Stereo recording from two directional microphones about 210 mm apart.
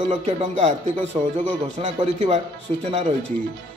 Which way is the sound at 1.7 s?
30° right (ahead or behind).